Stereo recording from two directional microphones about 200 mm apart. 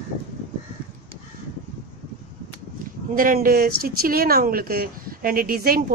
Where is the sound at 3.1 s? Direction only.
45° right (ahead or behind).